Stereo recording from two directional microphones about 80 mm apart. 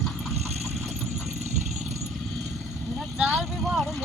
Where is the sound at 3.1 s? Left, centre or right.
Centre.